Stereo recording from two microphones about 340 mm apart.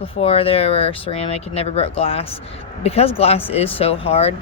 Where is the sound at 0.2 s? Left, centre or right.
Centre.